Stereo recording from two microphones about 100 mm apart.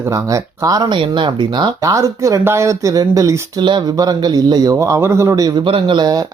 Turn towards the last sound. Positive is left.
turn(degrees=-45)  # may be behind; listen again after turning